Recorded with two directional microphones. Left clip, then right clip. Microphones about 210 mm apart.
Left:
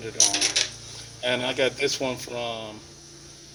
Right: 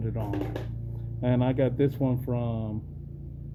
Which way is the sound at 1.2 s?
5° left (ahead or behind).